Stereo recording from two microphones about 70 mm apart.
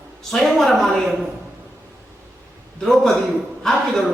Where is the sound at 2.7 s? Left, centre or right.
Centre.